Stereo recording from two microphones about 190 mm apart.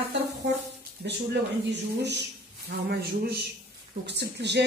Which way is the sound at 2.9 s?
60° right (ahead or behind).